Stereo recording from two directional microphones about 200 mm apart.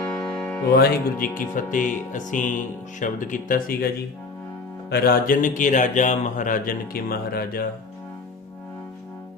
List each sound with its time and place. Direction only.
0.1 s music: 5° left (ahead or behind)
0.7 s speech: 50° left (ahead or behind)
4.9 s a man's voice: 50° left (ahead or behind)